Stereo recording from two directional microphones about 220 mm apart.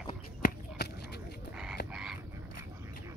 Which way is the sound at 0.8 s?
50° left (ahead or behind).